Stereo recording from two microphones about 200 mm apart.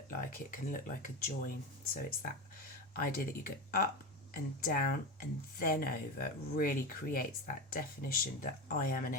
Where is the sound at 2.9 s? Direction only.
45° left (ahead or behind).